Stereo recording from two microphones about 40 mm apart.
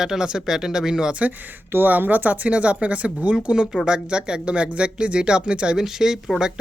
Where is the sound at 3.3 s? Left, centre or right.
Right.